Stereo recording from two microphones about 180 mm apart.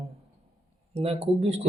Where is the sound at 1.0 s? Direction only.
35° right (ahead or behind).